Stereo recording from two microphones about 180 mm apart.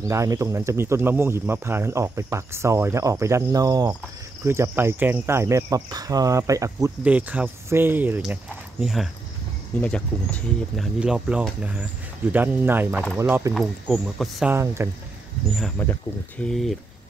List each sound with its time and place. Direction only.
0.1 s speech: 15° right (ahead or behind)
13.5 s speech: 5° right (ahead or behind)
14.5 s speech: 15° right (ahead or behind)
15.8 s speech: 10° left (ahead or behind)